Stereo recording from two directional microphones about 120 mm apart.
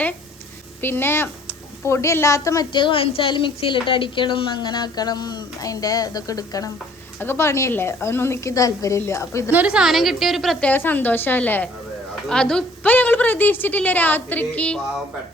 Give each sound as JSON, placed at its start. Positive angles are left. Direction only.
{"t": 0.8, "sound": "a woman's voice", "side_deg": 15}
{"t": 2.7, "sound": "a woman's voice", "side_deg": 45}
{"t": 7.2, "sound": "a woman's voice", "side_deg": 20}
{"t": 9.5, "sound": "a woman's voice", "side_deg": -10}
{"t": 10.7, "sound": "a woman's voice", "side_deg": 15}